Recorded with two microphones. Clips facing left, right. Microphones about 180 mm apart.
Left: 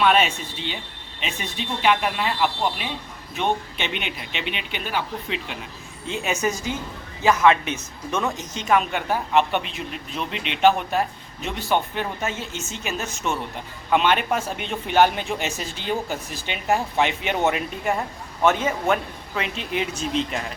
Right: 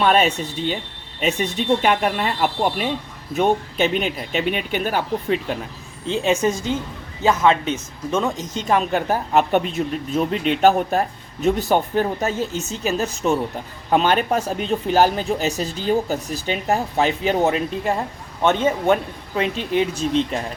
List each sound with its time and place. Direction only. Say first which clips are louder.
0.0 s speech: right 2 dB; 40° right (ahead or behind)
6.1 s a woman's voice: right 6 dB; 30° right (ahead or behind)